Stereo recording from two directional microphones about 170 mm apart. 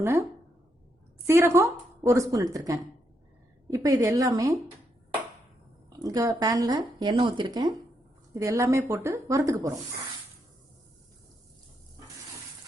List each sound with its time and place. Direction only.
0.0 s speech: 15° right (ahead or behind)
1.3 s speech: 15° right (ahead or behind)
6.1 s speech: 20° right (ahead or behind)